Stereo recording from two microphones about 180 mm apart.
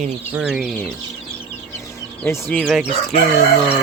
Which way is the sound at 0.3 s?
5° right (ahead or behind).